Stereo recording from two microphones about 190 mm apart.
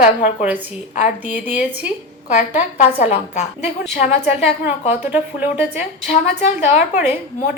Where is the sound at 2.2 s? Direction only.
40° left (ahead or behind).